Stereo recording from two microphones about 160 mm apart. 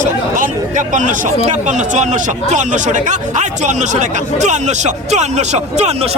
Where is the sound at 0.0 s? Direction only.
55° right (ahead or behind).